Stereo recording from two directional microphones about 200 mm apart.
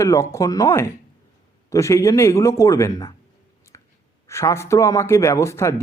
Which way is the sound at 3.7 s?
15° left (ahead or behind).